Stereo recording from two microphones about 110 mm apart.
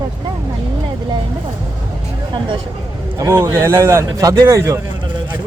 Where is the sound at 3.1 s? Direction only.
25° right (ahead or behind).